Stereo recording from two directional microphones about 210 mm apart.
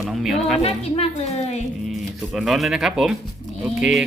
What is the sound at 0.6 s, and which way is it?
A woman's voice, 30° left (ahead or behind).